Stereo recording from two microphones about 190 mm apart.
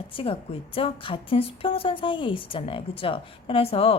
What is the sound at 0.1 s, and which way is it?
A woman's voice, 30° left (ahead or behind).